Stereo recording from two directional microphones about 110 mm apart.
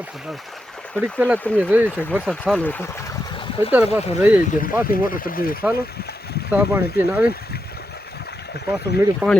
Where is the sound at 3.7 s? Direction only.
20° right (ahead or behind).